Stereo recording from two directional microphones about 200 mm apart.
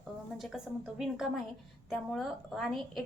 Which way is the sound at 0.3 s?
Centre (ahead or behind).